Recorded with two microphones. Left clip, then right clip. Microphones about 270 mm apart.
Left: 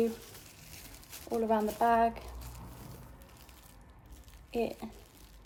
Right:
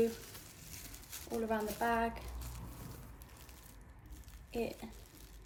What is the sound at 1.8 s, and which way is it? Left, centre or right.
Speech, left.